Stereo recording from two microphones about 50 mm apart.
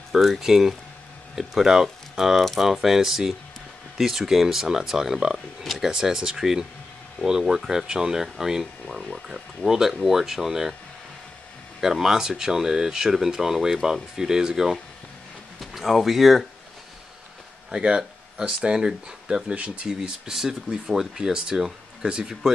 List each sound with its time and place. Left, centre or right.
0.1 s speech: centre
9.7 s speech: centre
11.8 s speech: centre
17.6 s speech: centre
19.5 s speech: right
19.9 s speech: centre